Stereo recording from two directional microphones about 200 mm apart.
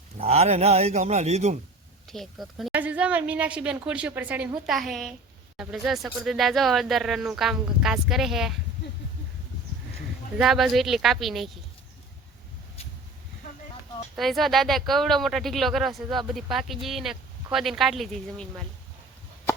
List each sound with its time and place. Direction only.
0.2 s a man's voice: 30° right (ahead or behind)
2.0 s speech: centre (ahead or behind)
10.3 s speech: centre (ahead or behind)
14.2 s speech: centre (ahead or behind)